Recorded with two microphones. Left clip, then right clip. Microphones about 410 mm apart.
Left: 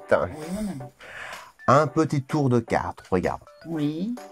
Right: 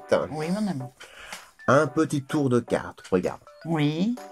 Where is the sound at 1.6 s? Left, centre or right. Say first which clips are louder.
Left 1 dB; left.